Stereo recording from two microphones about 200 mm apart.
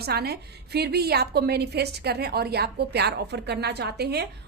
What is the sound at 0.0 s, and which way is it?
A woman's voice, 50° right (ahead or behind).